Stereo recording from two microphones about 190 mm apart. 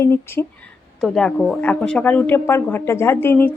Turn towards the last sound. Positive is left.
turn(degrees=10)  # may be behind; listen again after turning